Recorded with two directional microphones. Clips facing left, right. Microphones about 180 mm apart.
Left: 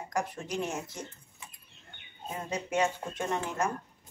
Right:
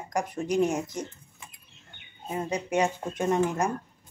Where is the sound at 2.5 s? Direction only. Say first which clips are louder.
Right 3 dB; 15° right (ahead or behind).